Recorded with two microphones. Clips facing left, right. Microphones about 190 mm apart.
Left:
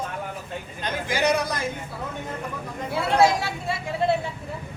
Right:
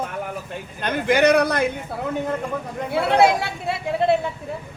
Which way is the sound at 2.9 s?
60° right (ahead or behind).